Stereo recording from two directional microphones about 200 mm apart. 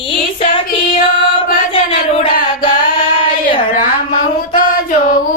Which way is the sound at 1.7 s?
30° left (ahead or behind).